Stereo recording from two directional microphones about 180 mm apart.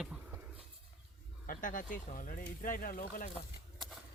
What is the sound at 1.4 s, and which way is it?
Speech, 50° left (ahead or behind).